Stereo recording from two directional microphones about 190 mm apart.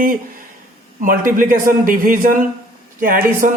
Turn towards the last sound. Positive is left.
turn(degrees=-45)  # may be behind; listen again after turning